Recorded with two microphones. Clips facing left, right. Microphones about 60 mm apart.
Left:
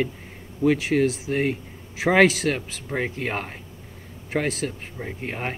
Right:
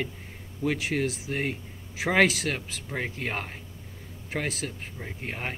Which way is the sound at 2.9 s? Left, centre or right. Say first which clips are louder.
Left 5 dB; centre.